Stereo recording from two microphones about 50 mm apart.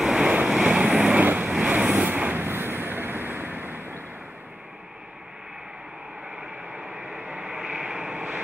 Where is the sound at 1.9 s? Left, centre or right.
Right.